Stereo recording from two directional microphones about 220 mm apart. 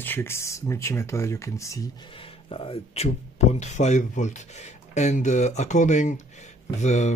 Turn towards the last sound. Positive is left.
turn(degrees=30)  # may be behind; listen again after turning